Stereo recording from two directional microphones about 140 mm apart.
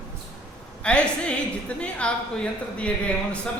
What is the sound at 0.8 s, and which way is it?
Speech, 10° left (ahead or behind).